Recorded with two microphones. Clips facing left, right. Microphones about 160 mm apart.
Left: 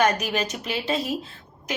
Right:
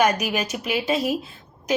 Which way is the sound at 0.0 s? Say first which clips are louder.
Right 1 dB; 10° right (ahead or behind).